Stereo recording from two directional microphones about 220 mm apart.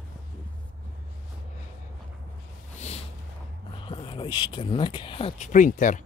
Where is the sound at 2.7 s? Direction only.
30° left (ahead or behind).